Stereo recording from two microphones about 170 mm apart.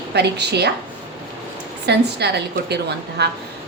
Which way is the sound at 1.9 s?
75° right (ahead or behind).